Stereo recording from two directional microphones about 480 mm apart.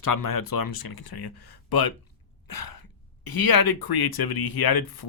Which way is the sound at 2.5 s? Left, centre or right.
Left.